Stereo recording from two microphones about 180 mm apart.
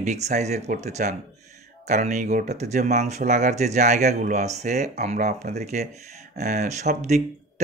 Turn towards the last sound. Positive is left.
turn(degrees=-40)  # may be behind; listen again after turning